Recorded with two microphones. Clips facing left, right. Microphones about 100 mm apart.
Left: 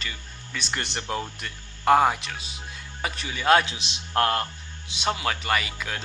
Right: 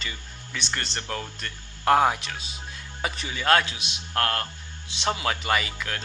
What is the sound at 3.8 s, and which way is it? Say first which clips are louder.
Speech: left 3 dB; 25° left (ahead or behind).